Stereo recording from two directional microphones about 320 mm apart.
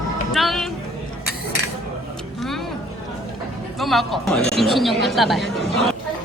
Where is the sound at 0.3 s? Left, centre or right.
Centre.